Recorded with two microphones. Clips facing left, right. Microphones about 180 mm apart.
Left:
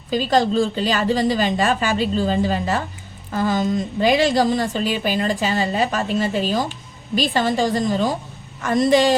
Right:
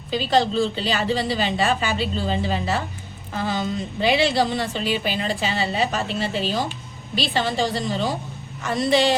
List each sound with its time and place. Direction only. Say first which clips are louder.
0.1 s a woman's voice: left 2 dB; 45° left (ahead or behind)